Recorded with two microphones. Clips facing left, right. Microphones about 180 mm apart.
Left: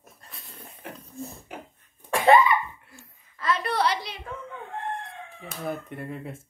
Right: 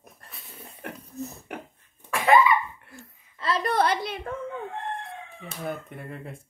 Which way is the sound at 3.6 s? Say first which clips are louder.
Right 6 dB; 50° right (ahead or behind).